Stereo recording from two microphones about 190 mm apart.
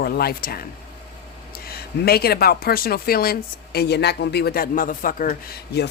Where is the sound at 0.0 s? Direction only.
55° left (ahead or behind).